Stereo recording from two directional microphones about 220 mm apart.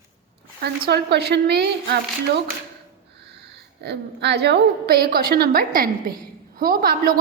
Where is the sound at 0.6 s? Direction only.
50° right (ahead or behind).